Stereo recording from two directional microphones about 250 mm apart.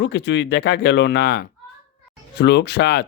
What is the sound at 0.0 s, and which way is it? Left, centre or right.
Mantra, left.